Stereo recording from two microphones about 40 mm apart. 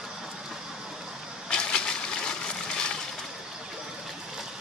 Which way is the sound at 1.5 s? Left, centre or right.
Left.